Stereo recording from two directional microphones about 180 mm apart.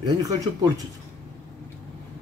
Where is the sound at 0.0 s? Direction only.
20° right (ahead or behind).